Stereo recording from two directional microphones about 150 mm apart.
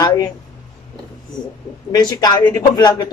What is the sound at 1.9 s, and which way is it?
Speech, 25° left (ahead or behind).